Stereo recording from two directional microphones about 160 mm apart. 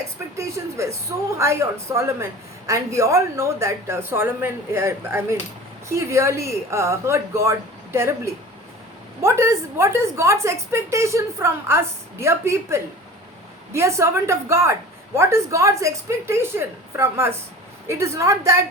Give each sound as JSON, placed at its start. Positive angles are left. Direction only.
{"t": 0.3, "sound": "a woman's voice", "side_deg": -20}